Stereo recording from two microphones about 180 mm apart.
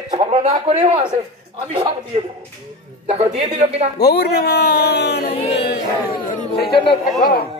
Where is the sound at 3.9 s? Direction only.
65° left (ahead or behind).